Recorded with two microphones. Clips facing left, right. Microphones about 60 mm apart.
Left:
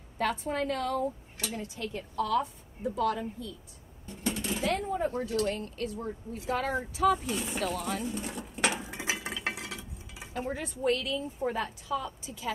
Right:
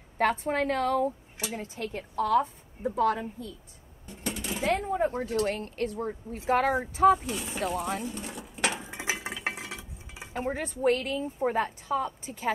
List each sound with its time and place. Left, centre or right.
0.2 s a woman's voice: right
1.5 s speech: right
1.9 s speech: right
4.5 s speech: right
7.2 s speech: centre
7.5 s speech: right
8.0 s dishes: centre
9.2 s stir: centre
9.6 s cutlery: right